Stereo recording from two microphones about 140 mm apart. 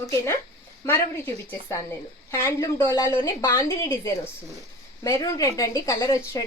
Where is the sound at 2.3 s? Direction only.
20° left (ahead or behind).